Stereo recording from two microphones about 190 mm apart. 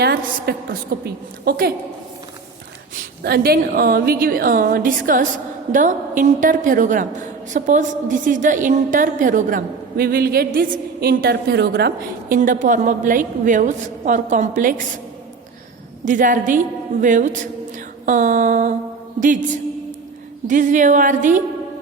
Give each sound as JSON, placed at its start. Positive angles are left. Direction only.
{"t": 0.0, "sound": "a woman's voice", "side_deg": -55}
{"t": 2.9, "sound": "a woman's voice", "side_deg": -55}
{"t": 16.0, "sound": "a woman's voice", "side_deg": -45}
{"t": 17.0, "sound": "a sound", "side_deg": -40}
{"t": 20.5, "sound": "a woman's voice", "side_deg": -40}